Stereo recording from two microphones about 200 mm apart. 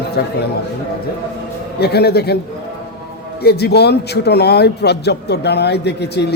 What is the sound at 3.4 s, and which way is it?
Speech, 55° left (ahead or behind).